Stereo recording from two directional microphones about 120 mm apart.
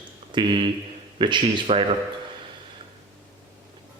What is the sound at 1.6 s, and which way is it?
Speech, 55° right (ahead or behind).